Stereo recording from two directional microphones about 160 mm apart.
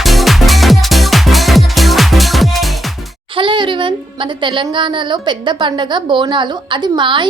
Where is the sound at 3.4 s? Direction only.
30° right (ahead or behind).